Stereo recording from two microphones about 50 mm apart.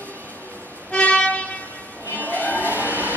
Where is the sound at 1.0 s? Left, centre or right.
Left.